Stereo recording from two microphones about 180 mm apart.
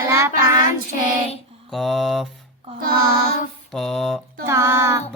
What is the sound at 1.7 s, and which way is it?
Speech, centre (ahead or behind).